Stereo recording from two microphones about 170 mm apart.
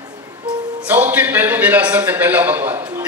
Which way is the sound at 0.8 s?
10° right (ahead or behind).